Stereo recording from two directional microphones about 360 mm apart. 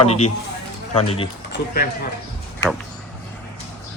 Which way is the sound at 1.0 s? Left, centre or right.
Centre.